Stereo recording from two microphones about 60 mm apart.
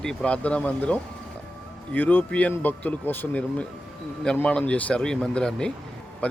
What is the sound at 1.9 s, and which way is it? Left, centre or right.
Speech, left.